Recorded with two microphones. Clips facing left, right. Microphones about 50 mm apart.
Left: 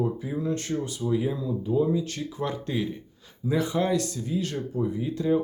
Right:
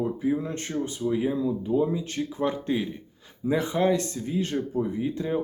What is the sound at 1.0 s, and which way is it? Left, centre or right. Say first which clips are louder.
Speech: right 3 dB; centre.